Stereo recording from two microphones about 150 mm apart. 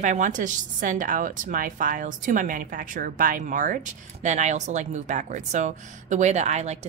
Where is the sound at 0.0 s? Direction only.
55° right (ahead or behind).